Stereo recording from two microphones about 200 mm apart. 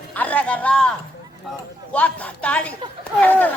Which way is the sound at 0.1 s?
5° left (ahead or behind).